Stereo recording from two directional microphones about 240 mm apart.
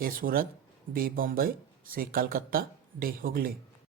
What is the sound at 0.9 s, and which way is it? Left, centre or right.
Speech, right.